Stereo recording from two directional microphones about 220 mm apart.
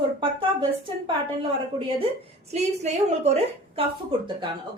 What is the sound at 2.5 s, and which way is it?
A woman's voice, 30° right (ahead or behind).